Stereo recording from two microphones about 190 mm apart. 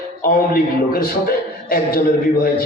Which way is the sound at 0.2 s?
50° left (ahead or behind).